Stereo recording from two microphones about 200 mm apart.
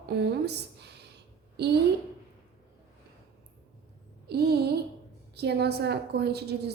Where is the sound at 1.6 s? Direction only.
55° right (ahead or behind).